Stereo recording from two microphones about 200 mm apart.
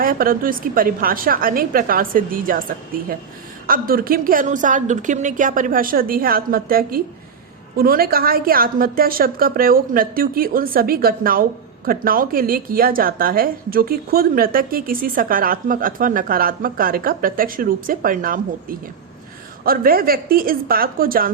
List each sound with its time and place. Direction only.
0.0 s a woman's voice: 45° right (ahead or behind)